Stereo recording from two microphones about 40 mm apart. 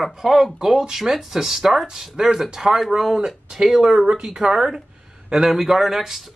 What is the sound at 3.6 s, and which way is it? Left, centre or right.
Speech, centre.